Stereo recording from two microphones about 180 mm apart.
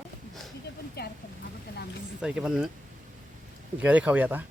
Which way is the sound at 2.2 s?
5° right (ahead or behind).